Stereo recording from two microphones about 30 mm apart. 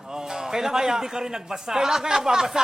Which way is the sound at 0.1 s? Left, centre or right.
Centre.